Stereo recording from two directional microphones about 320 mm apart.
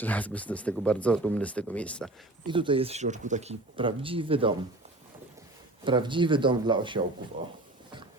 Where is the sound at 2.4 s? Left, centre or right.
Centre.